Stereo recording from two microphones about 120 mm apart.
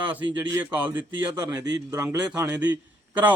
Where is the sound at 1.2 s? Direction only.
25° right (ahead or behind).